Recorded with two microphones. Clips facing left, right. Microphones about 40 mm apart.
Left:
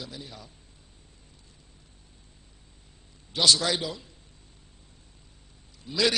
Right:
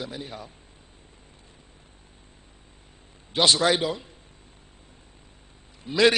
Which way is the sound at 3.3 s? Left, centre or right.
Right.